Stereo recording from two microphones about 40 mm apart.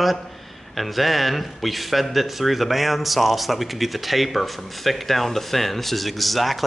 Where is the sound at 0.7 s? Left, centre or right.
Centre.